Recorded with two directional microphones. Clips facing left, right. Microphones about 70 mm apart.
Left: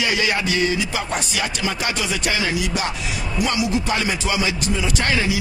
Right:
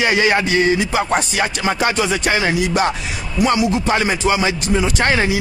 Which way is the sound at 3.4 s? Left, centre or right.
Right.